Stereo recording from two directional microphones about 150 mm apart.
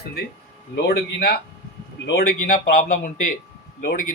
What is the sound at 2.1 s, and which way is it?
Speech, 65° left (ahead or behind).